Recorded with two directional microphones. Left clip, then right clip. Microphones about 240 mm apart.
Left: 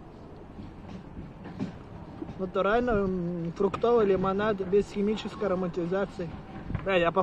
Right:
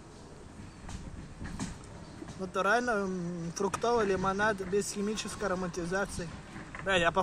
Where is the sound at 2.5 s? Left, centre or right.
Centre.